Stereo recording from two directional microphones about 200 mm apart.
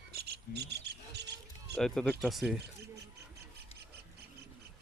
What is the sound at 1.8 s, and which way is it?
Speech, centre (ahead or behind).